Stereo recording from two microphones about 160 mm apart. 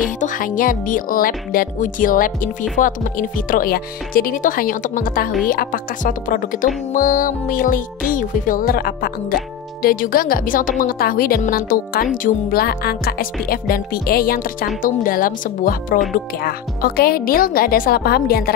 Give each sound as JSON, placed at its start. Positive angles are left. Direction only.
{"t": 0.2, "sound": "speech", "side_deg": 55}
{"t": 16.3, "sound": "speech", "side_deg": 70}